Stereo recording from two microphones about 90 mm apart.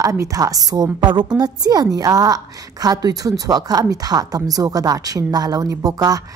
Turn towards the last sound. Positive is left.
turn(degrees=-40)  # may be behind; listen again after turning